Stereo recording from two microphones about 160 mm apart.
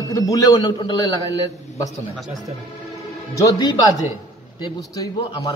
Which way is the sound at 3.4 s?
20° left (ahead or behind).